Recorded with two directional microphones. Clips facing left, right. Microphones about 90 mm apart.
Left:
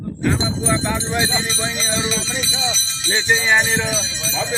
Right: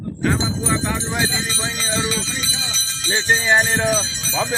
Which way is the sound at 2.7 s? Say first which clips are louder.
Even; 45° right (ahead or behind).